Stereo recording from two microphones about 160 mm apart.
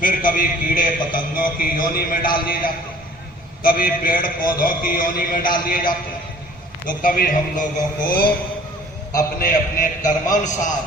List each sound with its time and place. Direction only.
0.0 s a man's voice: 60° left (ahead or behind)
3.6 s a man's voice: 60° left (ahead or behind)
9.4 s a man's voice: 60° left (ahead or behind)